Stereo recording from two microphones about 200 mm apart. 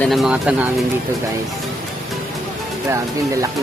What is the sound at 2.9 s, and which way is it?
Speech, 15° right (ahead or behind).